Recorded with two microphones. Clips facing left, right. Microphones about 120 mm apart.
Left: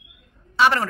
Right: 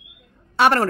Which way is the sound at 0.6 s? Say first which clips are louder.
Right 2 dB; 55° right (ahead or behind).